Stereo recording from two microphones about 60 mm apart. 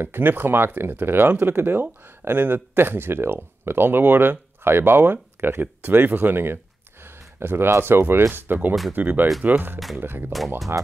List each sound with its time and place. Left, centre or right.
0.0 s speech: right